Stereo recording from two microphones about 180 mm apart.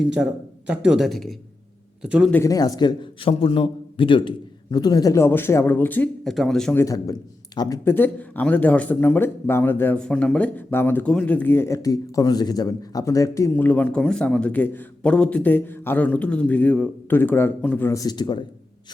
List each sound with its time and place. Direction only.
0.2 s a man's voice: 5° right (ahead or behind)
2.3 s a man's voice: 20° left (ahead or behind)
6.8 s a man's voice: 20° left (ahead or behind)